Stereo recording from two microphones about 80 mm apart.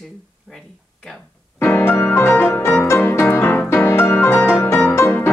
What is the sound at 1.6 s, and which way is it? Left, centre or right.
Music, left.